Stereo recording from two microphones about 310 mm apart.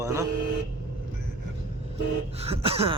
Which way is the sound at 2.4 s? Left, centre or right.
Centre.